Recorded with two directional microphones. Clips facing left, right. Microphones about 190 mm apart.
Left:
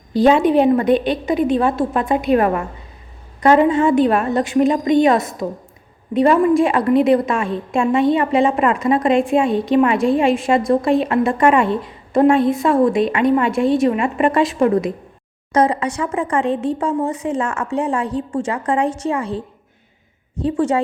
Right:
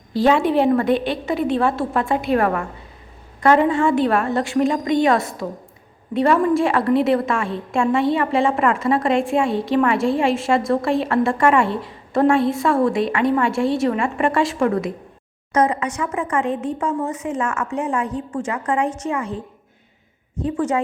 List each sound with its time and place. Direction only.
0.1 s a woman's voice: 20° left (ahead or behind)
15.5 s speech: 30° left (ahead or behind)
20.4 s speech: 30° left (ahead or behind)